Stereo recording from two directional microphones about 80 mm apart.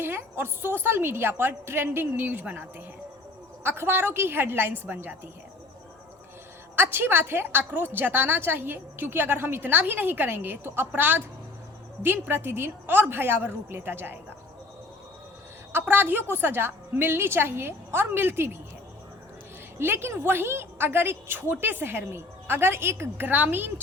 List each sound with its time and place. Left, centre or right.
0.0 s a woman's voice: right
6.7 s a woman's voice: right
15.7 s a woman's voice: right
19.8 s a woman's voice: right